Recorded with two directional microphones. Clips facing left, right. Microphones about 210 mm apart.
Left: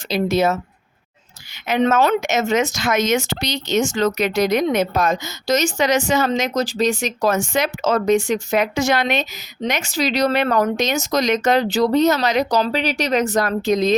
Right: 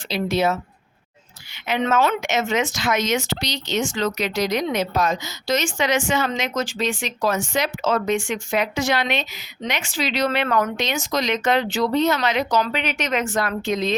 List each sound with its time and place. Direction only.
0.1 s speech: 45° left (ahead or behind)
1.6 s speech: 45° left (ahead or behind)